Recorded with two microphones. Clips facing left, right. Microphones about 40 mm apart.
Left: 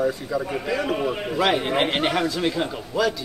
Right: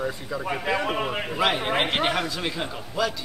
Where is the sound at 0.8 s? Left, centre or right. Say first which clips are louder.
Left 2 dB; right.